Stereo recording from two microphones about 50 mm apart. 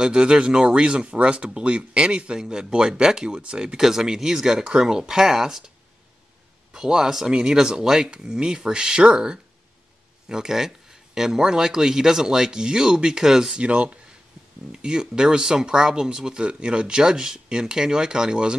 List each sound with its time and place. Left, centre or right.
0.0 s speech: centre
6.7 s speech: centre
13.6 s speech: right